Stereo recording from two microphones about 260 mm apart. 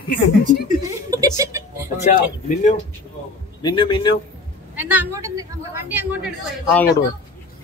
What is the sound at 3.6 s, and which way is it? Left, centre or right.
Speech, centre.